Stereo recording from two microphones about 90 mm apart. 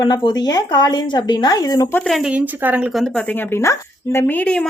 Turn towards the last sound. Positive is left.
turn(degrees=20)  # may be behind; listen again after turning